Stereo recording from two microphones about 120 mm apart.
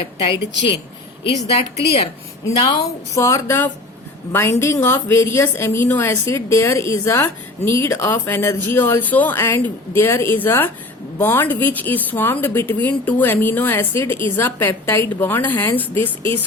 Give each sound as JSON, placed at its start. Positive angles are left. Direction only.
{"t": 1.2, "sound": "a woman's voice", "side_deg": 55}
{"t": 2.6, "sound": "a woman's voice", "side_deg": 40}
{"t": 3.2, "sound": "a woman's voice", "side_deg": 25}